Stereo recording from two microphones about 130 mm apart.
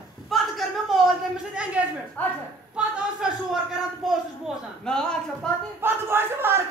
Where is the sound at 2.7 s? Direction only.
5° right (ahead or behind).